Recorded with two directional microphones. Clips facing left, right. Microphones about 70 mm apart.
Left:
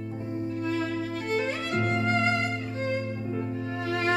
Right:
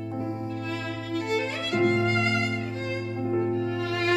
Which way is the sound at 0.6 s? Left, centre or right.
Left.